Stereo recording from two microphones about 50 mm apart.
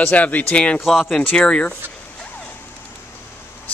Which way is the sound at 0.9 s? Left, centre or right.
Centre.